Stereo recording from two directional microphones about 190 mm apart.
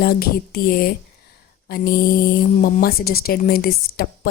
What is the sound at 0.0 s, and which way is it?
Speech, 55° left (ahead or behind).